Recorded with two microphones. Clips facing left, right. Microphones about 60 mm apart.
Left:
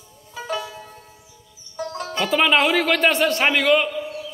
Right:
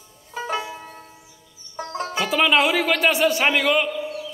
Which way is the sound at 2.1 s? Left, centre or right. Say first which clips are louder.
Left 1 dB; centre.